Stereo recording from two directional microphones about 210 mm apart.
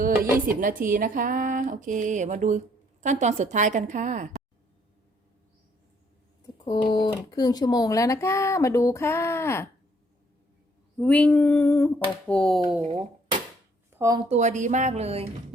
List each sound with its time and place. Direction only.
0.6 s speech: 40° right (ahead or behind)
6.4 s a sound: 20° left (ahead or behind)
7.3 s speech: 20° left (ahead or behind)
10.9 s speech: 5° left (ahead or behind)
12.8 s a sound: 25° right (ahead or behind)
14.0 s a woman's voice: 15° right (ahead or behind)
14.3 s speech: 35° right (ahead or behind)